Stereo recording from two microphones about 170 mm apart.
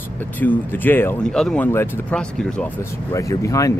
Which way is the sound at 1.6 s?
15° left (ahead or behind).